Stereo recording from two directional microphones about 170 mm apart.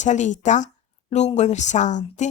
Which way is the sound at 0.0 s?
45° left (ahead or behind).